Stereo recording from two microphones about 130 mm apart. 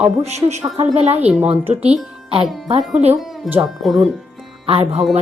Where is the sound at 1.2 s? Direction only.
10° right (ahead or behind).